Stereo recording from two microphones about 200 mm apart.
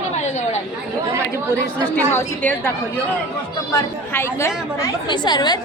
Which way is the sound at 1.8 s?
10° left (ahead or behind).